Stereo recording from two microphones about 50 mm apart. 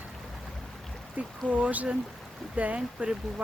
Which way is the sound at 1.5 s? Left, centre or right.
Right.